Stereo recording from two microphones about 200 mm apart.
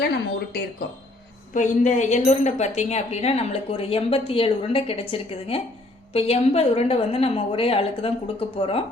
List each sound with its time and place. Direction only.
1.5 s a woman's voice: 40° left (ahead or behind)